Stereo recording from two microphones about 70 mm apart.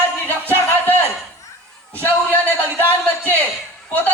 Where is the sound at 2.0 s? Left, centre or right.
Left.